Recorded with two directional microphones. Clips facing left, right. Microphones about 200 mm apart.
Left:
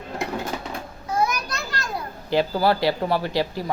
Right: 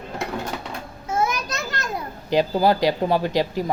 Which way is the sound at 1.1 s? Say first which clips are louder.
Right 1 dB; 25° right (ahead or behind).